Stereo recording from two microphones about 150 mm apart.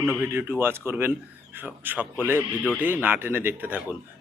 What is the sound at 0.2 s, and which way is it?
Speech, 10° right (ahead or behind).